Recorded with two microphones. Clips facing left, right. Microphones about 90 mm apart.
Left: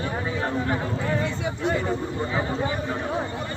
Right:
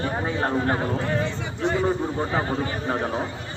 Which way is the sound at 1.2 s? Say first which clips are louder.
Even; centre (ahead or behind).